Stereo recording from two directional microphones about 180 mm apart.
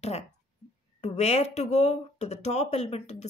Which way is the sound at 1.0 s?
35° left (ahead or behind).